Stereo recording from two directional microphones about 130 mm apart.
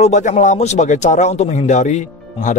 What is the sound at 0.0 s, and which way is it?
Speech, 65° left (ahead or behind).